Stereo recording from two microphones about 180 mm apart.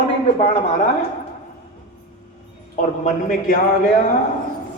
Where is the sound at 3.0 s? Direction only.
45° left (ahead or behind).